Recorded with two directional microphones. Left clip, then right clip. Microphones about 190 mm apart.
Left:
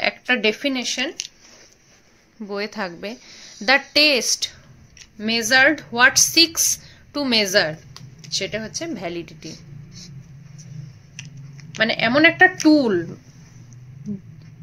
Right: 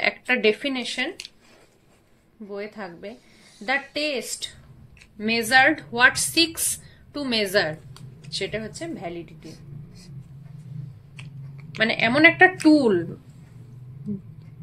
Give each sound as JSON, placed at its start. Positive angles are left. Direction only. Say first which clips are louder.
{"t": 0.0, "sound": "speech", "louder": "left 1 dB", "side_deg": 25}
{"t": 2.4, "sound": "speech", "louder": "left 7 dB", "side_deg": 45}
{"t": 5.2, "sound": "a woman's voice", "louder": "left 2 dB", "side_deg": 30}
{"t": 11.1, "sound": "speech", "louder": "left 5 dB", "side_deg": 25}